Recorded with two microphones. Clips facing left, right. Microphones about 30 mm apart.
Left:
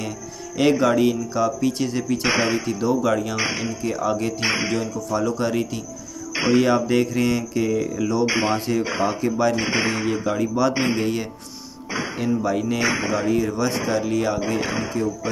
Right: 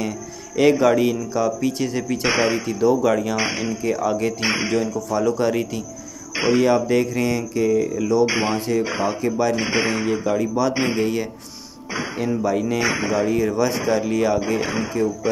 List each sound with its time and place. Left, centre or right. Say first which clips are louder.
0.6 s speech: right 2 dB; centre
6.3 s music: even; centre
6.6 s speech: right 1 dB; centre
7.8 s speech: right 3 dB; centre
11.9 s music: right 1 dB; centre
12.4 s speech: right 3 dB; centre